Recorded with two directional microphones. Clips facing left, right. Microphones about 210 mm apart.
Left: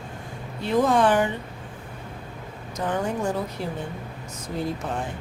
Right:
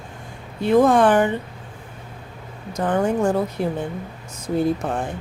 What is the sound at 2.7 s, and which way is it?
Speech, 50° right (ahead or behind).